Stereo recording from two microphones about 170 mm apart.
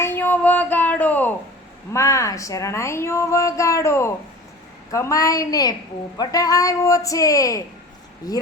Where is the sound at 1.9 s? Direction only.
15° left (ahead or behind).